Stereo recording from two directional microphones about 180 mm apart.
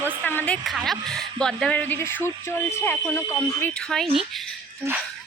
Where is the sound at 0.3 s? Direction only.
10° left (ahead or behind).